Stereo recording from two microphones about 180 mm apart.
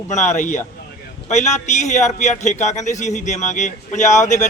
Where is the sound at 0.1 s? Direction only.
45° left (ahead or behind).